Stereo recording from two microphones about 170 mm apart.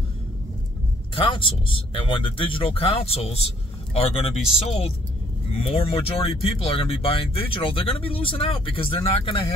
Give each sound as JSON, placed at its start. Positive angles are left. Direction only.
{"t": 1.1, "sound": "speech", "side_deg": 30}